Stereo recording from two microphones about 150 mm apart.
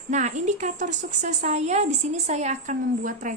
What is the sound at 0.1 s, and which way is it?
A woman's voice, 50° right (ahead or behind).